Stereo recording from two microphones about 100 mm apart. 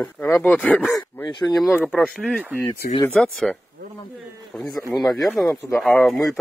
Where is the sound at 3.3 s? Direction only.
Centre (ahead or behind).